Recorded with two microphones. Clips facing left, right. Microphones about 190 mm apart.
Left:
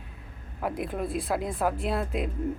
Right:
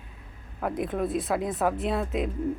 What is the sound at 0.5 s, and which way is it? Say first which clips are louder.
Speech: right 2 dB; 5° left (ahead or behind).